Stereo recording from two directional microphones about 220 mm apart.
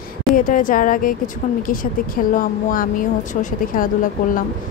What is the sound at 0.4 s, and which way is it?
Speech, 40° left (ahead or behind).